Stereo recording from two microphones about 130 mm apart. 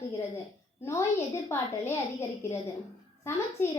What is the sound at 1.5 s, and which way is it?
A child's voice, 20° left (ahead or behind).